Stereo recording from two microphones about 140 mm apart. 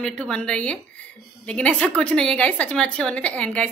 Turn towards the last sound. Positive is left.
turn(degrees=10)  # may be behind; listen again after turning